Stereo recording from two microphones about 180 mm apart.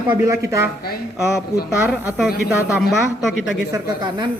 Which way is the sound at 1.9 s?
Centre (ahead or behind).